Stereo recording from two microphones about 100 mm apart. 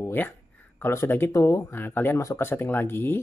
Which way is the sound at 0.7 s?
25° left (ahead or behind).